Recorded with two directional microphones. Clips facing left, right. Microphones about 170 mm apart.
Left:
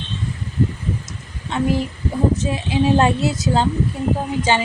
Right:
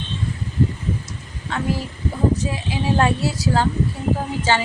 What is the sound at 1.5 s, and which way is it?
A woman's voice, 20° left (ahead or behind).